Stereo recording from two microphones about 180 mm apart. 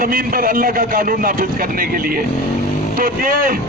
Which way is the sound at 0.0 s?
55° right (ahead or behind).